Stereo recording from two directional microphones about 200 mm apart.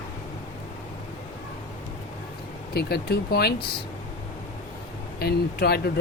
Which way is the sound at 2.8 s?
55° left (ahead or behind).